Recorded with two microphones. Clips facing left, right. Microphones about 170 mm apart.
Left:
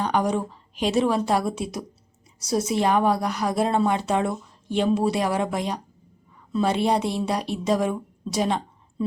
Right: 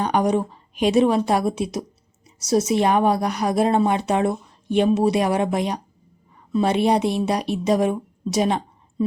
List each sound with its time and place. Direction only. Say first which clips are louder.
0.0 s a woman's voice: right 3 dB; 15° right (ahead or behind)